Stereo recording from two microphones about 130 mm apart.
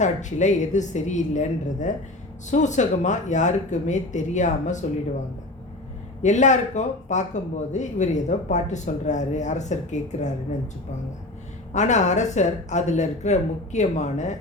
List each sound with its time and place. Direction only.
0.0 s speech: 70° left (ahead or behind)
6.2 s speech: 70° left (ahead or behind)
11.7 s speech: 65° left (ahead or behind)